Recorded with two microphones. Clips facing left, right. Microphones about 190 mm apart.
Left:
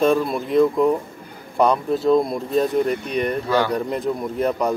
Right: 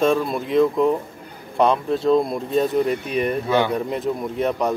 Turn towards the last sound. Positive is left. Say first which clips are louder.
# left 1 dB
turn(degrees=0)  # may be behind; listen again after turning